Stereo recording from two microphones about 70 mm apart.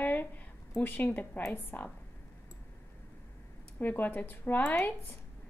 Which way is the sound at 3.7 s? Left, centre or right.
Left.